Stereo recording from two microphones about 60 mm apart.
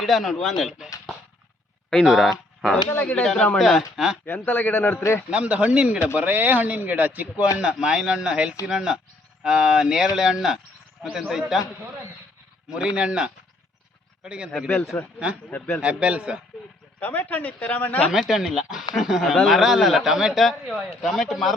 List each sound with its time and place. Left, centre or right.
0.0 s a man's voice: centre
2.0 s a man's voice: centre
3.0 s speech: left
3.2 s speech: centre
3.6 s a man's voice: centre
4.3 s a man's voice: left
5.3 s speech: right
6.1 s speech: right
7.6 s speech: centre
12.7 s speech: centre
14.9 s a man's voice: left
15.8 s speech: centre
17.0 s speech: left
18.1 s a man's voice: centre